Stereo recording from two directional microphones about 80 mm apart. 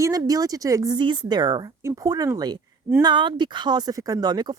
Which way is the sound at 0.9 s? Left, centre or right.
Right.